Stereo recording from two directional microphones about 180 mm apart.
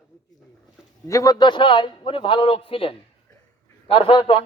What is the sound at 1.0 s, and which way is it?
A man's voice, 20° left (ahead or behind).